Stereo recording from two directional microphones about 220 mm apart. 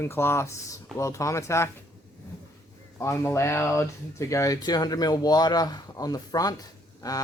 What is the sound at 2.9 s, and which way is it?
Speech, 10° left (ahead or behind).